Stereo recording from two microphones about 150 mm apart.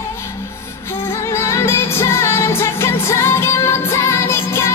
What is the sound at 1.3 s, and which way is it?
Music, 20° left (ahead or behind).